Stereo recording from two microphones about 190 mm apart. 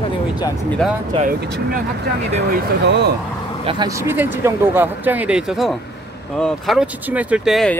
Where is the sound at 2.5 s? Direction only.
60° right (ahead or behind).